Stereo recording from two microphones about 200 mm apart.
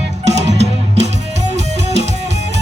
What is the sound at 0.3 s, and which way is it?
Music, 35° right (ahead or behind).